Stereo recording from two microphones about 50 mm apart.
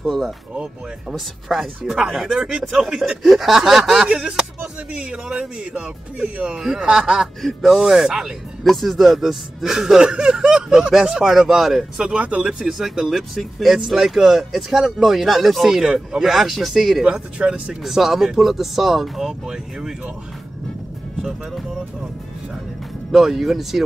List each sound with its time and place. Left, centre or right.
0.0 s speech: centre
5.6 s speech: centre
8.6 s speech: centre
12.0 s speech: right
12.4 s speech: centre
17.0 s speech: centre
17.8 s speech: centre
23.1 s speech: centre